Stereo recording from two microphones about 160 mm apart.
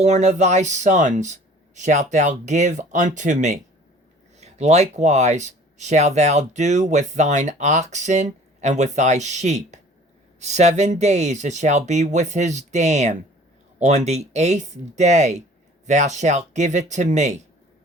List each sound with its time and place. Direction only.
0.0 s speech: 45° right (ahead or behind)